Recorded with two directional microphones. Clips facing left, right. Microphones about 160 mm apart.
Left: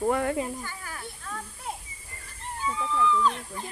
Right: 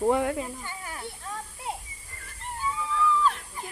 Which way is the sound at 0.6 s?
20° right (ahead or behind).